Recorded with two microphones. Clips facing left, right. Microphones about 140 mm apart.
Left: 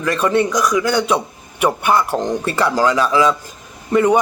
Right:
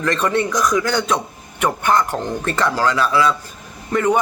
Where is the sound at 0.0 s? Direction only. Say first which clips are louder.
Left 2 dB; 10° left (ahead or behind).